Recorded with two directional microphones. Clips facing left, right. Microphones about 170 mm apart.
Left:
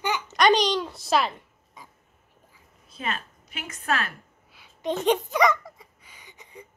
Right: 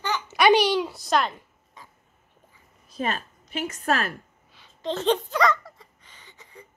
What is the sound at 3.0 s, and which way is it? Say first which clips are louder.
A woman's voice: right 4 dB; 35° right (ahead or behind).